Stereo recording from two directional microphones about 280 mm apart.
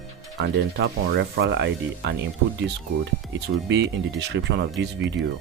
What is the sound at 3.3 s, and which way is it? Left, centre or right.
Speech, right.